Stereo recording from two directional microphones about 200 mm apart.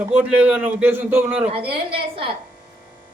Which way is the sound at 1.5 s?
30° right (ahead or behind).